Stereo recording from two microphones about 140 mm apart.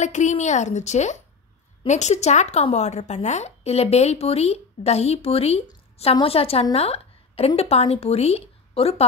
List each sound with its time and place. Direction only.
0.0 s a woman's voice: 60° left (ahead or behind)